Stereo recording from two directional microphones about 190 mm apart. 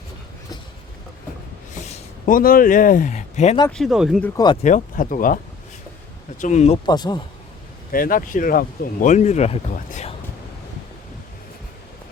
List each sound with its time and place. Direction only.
1.9 s speech: 45° left (ahead or behind)
3.7 s speech: centre (ahead or behind)
4.6 s speech: 45° left (ahead or behind)
6.4 s speech: 35° left (ahead or behind)
6.8 s speech: 20° left (ahead or behind)
7.9 s speech: 50° left (ahead or behind)